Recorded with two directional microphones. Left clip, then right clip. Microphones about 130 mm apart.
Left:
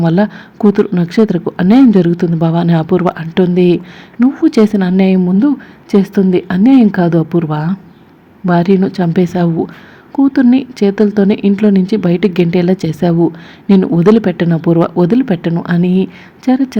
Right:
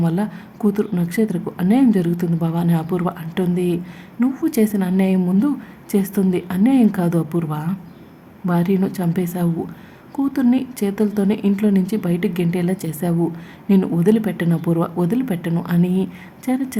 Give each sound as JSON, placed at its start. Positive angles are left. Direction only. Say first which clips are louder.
{"t": 0.0, "sound": "speech", "louder": "left 10 dB", "side_deg": 35}
{"t": 4.2, "sound": "speech", "louder": "left 9 dB", "side_deg": 30}
{"t": 5.2, "sound": "speech", "louder": "left 8 dB", "side_deg": 20}